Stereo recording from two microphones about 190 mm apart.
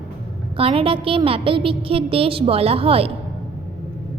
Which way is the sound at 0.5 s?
30° right (ahead or behind).